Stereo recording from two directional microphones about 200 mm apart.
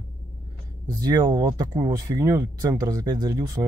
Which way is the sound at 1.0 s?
20° right (ahead or behind).